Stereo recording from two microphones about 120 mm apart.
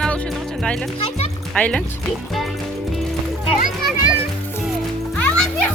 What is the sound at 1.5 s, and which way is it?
Speech, 10° left (ahead or behind).